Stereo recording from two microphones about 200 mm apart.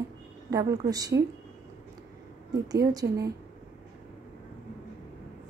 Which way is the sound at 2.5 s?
20° right (ahead or behind).